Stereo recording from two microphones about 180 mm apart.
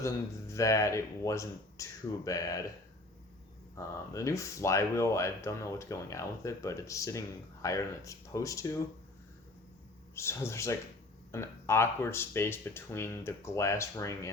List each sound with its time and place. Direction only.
0.0 s speech: 15° left (ahead or behind)
3.8 s speech: 15° left (ahead or behind)
10.2 s speech: 15° left (ahead or behind)